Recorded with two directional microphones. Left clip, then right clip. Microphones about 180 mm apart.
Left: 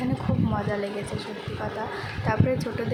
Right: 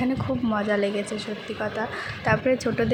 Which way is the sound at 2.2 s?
20° right (ahead or behind).